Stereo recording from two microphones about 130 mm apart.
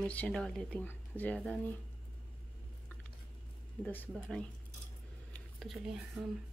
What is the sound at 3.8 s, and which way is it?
Speech, 15° left (ahead or behind).